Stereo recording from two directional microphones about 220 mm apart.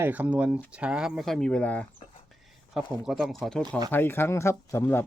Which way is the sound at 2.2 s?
Centre (ahead or behind).